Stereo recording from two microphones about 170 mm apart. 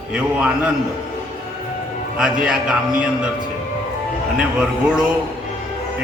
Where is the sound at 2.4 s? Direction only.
5° right (ahead or behind).